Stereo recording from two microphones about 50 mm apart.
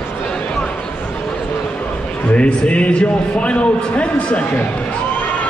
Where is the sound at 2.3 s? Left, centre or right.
Left.